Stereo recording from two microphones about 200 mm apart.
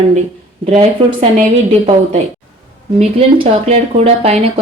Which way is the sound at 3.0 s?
30° right (ahead or behind).